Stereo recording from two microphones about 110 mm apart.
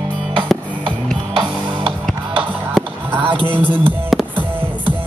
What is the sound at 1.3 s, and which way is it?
Music, 45° right (ahead or behind).